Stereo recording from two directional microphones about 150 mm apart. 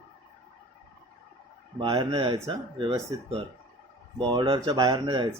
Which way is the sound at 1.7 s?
35° right (ahead or behind).